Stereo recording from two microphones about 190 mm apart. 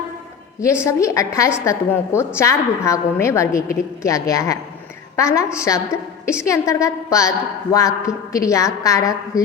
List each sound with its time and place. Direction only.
0.6 s a woman's voice: 15° left (ahead or behind)